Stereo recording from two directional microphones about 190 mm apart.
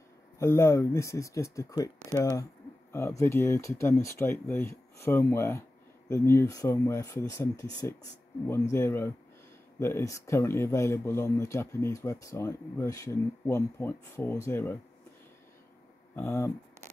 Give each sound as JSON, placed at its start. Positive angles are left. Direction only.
{"t": 0.4, "sound": "speech", "side_deg": 15}
{"t": 2.0, "sound": "speech", "side_deg": -15}
{"t": 2.9, "sound": "speech", "side_deg": 15}
{"t": 16.2, "sound": "speech", "side_deg": 15}